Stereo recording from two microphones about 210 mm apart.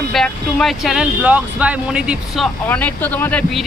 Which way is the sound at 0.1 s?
Centre (ahead or behind).